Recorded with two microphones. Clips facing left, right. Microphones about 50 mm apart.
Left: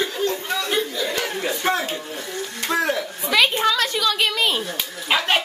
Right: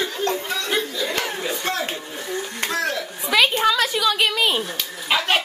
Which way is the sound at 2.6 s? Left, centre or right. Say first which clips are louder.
Left 3 dB; centre.